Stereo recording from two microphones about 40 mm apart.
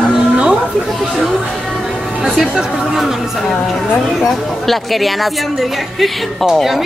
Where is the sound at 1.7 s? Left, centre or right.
Centre.